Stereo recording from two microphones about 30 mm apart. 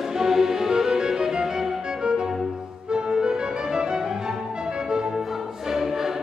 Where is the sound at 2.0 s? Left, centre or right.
Right.